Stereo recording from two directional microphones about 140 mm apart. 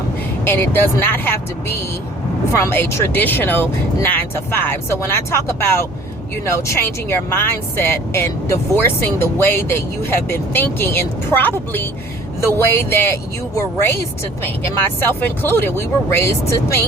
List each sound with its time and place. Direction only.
0.4 s speech: 15° left (ahead or behind)
15.0 s speech: 15° left (ahead or behind)